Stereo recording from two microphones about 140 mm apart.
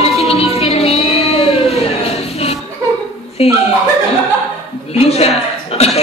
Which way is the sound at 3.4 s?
45° left (ahead or behind).